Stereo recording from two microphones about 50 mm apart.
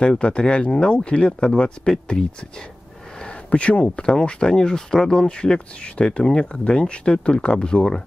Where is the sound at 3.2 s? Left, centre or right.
Left.